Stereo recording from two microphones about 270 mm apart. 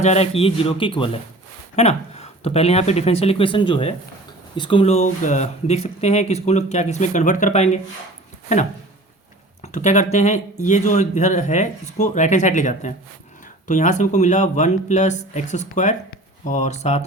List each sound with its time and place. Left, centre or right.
0.0 s speech: left